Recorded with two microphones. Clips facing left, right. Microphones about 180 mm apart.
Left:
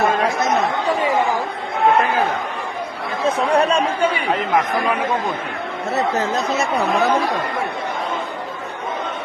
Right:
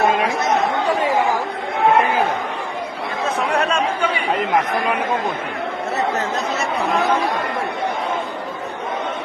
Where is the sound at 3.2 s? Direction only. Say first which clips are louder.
Left 4 dB; 30° left (ahead or behind).